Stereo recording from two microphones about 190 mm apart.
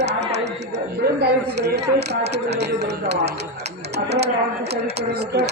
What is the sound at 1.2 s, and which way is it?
Speech, 60° right (ahead or behind).